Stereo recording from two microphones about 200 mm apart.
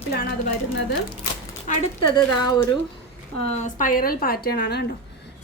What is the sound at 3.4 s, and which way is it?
A woman's voice, 35° left (ahead or behind).